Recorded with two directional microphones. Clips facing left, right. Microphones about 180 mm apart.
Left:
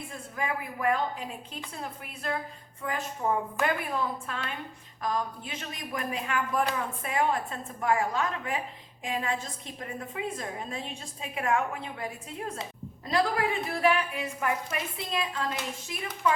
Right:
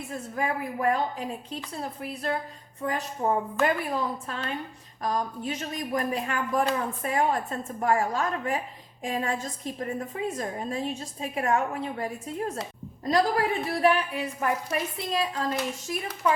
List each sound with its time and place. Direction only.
0.1 s a woman's voice: 40° right (ahead or behind)
13.7 s a woman's voice: 35° right (ahead or behind)